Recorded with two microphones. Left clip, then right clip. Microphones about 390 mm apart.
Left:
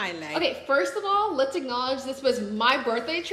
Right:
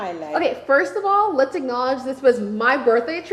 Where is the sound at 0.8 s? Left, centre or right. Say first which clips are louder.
Right 6 dB; right.